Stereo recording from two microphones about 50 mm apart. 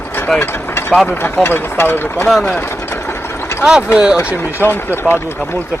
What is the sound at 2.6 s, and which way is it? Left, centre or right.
Vehicle, left.